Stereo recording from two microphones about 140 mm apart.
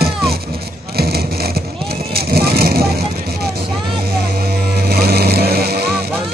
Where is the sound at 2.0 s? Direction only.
90° right.